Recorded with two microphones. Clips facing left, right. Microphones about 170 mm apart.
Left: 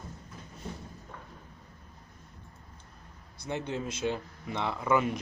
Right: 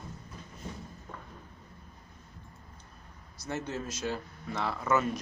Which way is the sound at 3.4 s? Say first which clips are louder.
Left 2 dB; 15° left (ahead or behind).